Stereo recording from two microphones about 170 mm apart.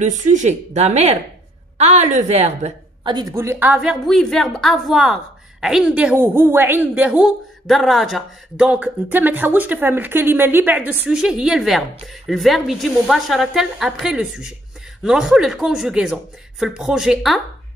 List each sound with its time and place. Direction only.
0.0 s a woman's voice: 45° right (ahead or behind)
3.0 s a woman's voice: 25° right (ahead or behind); by 17.4 s centre (ahead or behind)